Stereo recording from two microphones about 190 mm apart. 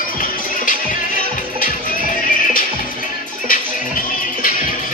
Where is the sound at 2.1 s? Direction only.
45° left (ahead or behind).